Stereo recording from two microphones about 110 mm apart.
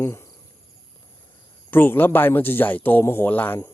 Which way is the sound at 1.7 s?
20° left (ahead or behind).